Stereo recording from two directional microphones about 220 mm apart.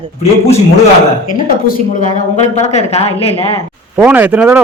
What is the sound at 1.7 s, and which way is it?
A woman's voice, 40° left (ahead or behind).